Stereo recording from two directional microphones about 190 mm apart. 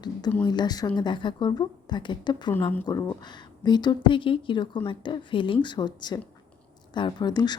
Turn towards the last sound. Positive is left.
turn(degrees=20)  # may be behind; listen again after turning